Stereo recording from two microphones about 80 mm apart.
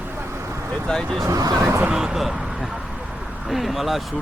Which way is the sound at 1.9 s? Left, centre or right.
Centre.